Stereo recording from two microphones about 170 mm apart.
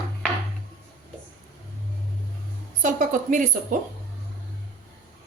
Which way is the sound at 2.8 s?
50° right (ahead or behind).